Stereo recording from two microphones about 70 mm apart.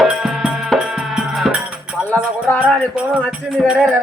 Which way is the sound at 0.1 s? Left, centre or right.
Centre.